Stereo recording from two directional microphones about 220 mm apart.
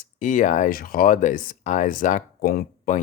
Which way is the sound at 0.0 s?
35° left (ahead or behind).